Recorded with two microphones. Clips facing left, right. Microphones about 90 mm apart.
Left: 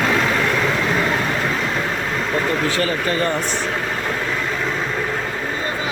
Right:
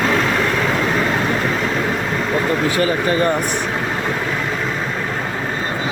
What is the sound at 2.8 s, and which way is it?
Speech, 20° right (ahead or behind).